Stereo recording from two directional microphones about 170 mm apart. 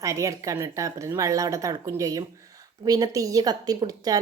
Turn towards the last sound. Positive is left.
turn(degrees=-20)  # may be behind; listen again after turning